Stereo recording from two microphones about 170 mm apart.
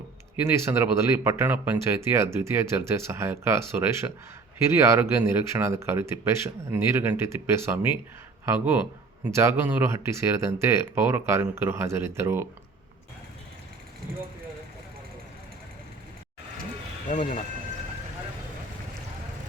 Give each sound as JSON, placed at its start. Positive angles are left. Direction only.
{"t": 0.4, "sound": "speech", "side_deg": -15}
{"t": 17.1, "sound": "speech", "side_deg": 50}